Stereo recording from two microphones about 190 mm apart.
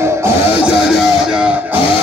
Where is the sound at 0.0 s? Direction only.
15° right (ahead or behind).